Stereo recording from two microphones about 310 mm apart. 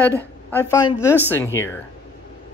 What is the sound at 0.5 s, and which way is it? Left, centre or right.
Speech, centre.